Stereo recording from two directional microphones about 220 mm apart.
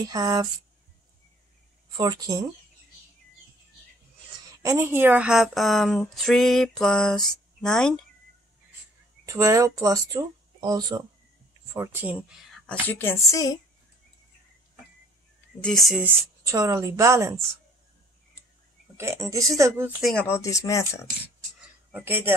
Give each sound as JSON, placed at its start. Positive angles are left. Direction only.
{"t": 0.0, "sound": "speech", "side_deg": -15}
{"t": 2.0, "sound": "speech", "side_deg": -20}
{"t": 4.6, "sound": "speech", "side_deg": -10}
{"t": 9.2, "sound": "speech", "side_deg": -15}
{"t": 12.6, "sound": "speech", "side_deg": 5}
{"t": 15.6, "sound": "speech", "side_deg": 0}
{"t": 16.4, "sound": "speech", "side_deg": -15}
{"t": 18.9, "sound": "speech", "side_deg": -10}
{"t": 20.0, "sound": "speech", "side_deg": 0}
{"t": 20.2, "sound": "speech", "side_deg": 10}
{"t": 21.5, "sound": "a sound", "side_deg": -10}